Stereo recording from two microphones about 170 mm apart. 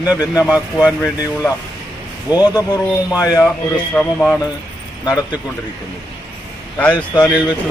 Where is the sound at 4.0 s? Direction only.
10° left (ahead or behind).